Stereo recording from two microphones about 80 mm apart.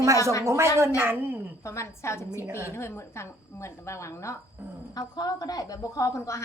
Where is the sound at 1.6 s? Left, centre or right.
Left.